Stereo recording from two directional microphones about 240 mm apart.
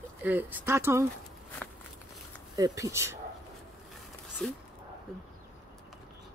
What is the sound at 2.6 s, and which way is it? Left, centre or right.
Speech, centre.